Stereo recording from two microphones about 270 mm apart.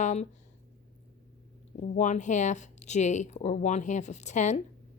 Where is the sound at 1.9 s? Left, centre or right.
Left.